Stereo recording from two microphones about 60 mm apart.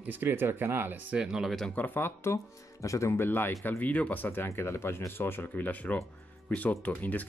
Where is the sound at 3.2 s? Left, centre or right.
Left.